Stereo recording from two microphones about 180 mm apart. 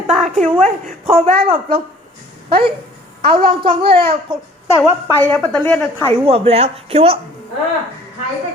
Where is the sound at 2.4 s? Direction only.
30° right (ahead or behind).